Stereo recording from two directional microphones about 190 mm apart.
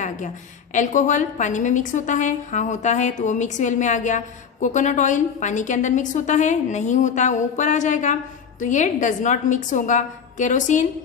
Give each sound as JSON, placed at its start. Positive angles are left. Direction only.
{"t": 0.7, "sound": "a woman's voice", "side_deg": 40}